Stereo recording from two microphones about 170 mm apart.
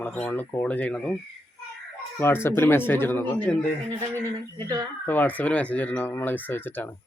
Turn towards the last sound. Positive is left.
turn(degrees=10)  # may be behind; listen again after turning